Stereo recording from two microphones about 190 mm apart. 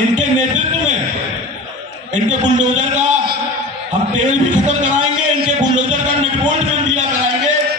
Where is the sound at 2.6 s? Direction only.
40° right (ahead or behind).